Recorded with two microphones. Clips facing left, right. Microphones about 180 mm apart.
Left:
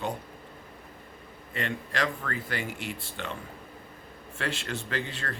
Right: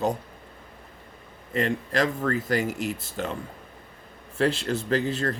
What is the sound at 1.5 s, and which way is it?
Speech, 40° right (ahead or behind).